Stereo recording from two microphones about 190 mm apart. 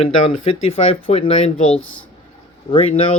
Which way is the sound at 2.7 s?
30° left (ahead or behind).